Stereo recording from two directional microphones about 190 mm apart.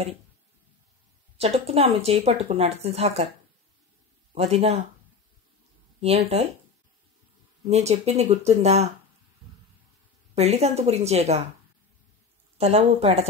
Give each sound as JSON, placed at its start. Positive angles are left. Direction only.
{"t": 1.4, "sound": "speech", "side_deg": -30}
{"t": 4.3, "sound": "speech", "side_deg": -30}
{"t": 5.9, "sound": "speech", "side_deg": -30}
{"t": 7.6, "sound": "speech", "side_deg": -35}
{"t": 10.3, "sound": "speech", "side_deg": -35}
{"t": 12.5, "sound": "speech", "side_deg": -30}